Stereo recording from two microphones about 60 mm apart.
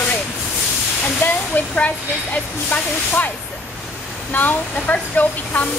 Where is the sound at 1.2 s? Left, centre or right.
Left.